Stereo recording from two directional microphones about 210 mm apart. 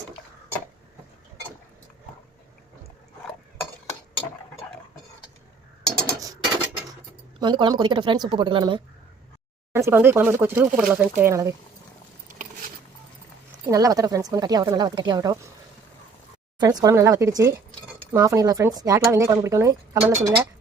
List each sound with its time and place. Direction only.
6.1 s a sound: 15° right (ahead or behind)
7.3 s speech: 20° right (ahead or behind)
9.7 s speech: 10° right (ahead or behind)
13.7 s speech: 15° right (ahead or behind)
16.6 s speech: 20° right (ahead or behind)